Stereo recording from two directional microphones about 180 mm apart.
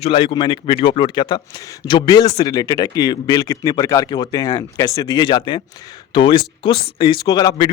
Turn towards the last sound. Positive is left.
turn(degrees=20)  # may be behind; listen again after turning